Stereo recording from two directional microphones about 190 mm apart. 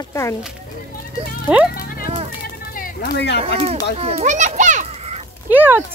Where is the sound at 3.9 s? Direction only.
35° right (ahead or behind).